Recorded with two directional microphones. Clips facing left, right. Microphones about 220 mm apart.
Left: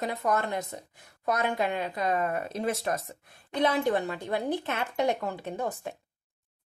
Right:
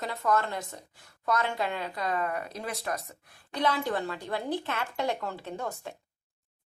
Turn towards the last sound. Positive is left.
turn(degrees=15)  # may be behind; listen again after turning